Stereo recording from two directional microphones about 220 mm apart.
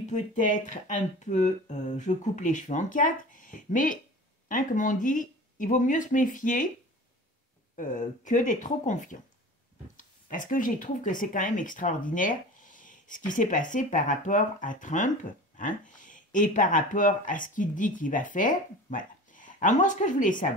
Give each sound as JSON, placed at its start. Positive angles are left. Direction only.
{"t": 0.0, "sound": "speech", "side_deg": 35}
{"t": 7.7, "sound": "speech", "side_deg": 35}